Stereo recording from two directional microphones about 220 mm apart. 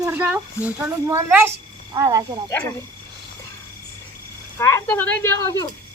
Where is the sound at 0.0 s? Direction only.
10° right (ahead or behind).